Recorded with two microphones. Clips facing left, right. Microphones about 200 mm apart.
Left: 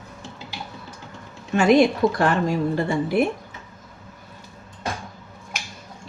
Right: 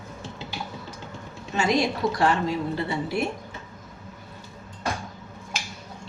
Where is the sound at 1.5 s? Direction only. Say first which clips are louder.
Left 7 dB; 60° left (ahead or behind).